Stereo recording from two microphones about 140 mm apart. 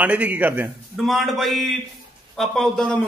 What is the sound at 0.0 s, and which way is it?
Speech, 10° right (ahead or behind).